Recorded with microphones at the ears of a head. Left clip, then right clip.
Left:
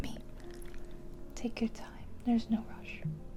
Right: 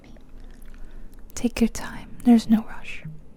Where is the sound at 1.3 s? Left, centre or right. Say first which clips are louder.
Right 13 dB; right.